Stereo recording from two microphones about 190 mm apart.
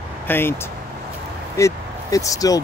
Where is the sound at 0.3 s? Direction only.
10° left (ahead or behind).